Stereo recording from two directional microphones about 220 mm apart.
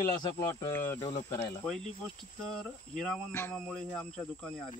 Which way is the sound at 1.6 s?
Centre (ahead or behind).